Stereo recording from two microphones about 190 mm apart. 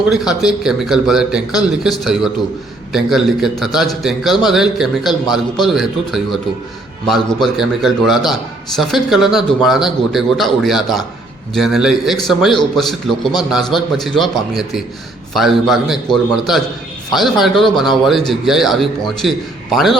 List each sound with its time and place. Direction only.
0.1 s a man's voice: 5° right (ahead or behind)
7.5 s a man's voice: centre (ahead or behind)